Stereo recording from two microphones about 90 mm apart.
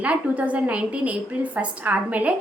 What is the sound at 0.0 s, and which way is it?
A woman's voice, 15° right (ahead or behind).